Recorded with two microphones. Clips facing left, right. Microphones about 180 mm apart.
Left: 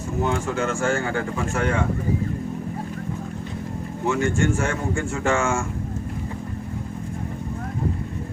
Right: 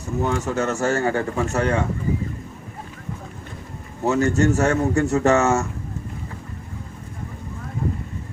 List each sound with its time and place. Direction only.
0.4 s speech: 40° right (ahead or behind)
4.0 s speech: 40° right (ahead or behind)